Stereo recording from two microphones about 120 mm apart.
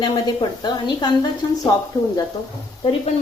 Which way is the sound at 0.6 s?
40° left (ahead or behind).